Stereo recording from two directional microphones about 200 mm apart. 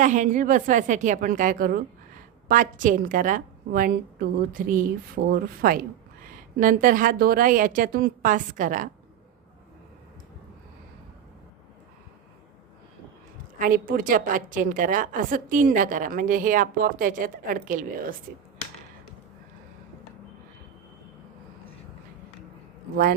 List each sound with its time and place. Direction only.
0.0 s a woman's voice: 40° right (ahead or behind)
13.6 s a woman's voice: 45° right (ahead or behind)